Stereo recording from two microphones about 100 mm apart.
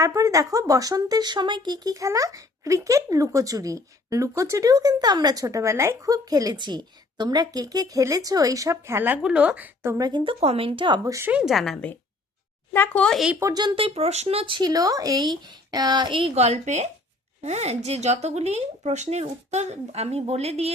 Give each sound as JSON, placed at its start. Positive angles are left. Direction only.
{"t": 0.0, "sound": "speech", "side_deg": -35}
{"t": 10.0, "sound": "a woman's voice", "side_deg": -45}
{"t": 10.2, "sound": "speech", "side_deg": -80}
{"t": 11.0, "sound": "speech", "side_deg": -30}
{"t": 11.3, "sound": "speech", "side_deg": -10}
{"t": 11.5, "sound": "speech", "side_deg": 0}
{"t": 12.7, "sound": "speech", "side_deg": 15}
{"t": 13.4, "sound": "a woman's voice", "side_deg": -45}
{"t": 13.7, "sound": "speech", "side_deg": -80}
{"t": 14.6, "sound": "a woman's voice", "side_deg": -40}